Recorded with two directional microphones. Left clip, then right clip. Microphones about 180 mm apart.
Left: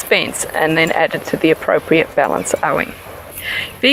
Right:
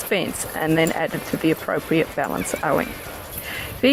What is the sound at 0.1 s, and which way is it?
Speech, 20° left (ahead or behind).